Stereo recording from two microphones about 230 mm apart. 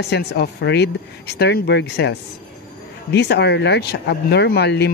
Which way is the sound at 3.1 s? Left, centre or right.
Left.